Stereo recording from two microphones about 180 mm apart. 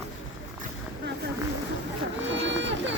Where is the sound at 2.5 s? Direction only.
85° right.